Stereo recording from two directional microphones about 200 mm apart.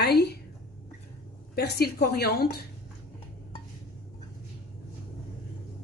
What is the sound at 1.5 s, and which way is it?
A woman's voice, 50° left (ahead or behind).